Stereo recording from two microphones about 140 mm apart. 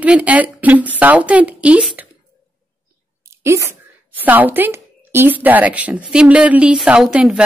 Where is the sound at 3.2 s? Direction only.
20° right (ahead or behind).